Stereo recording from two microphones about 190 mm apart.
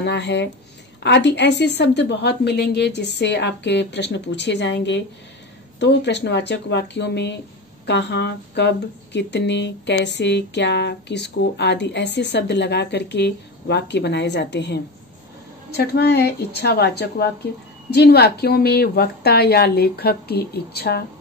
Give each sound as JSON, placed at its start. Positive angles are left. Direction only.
{"t": 0.0, "sound": "speech", "side_deg": 65}